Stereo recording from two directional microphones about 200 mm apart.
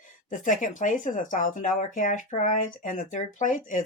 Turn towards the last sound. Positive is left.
turn(degrees=40)  # may be behind; listen again after turning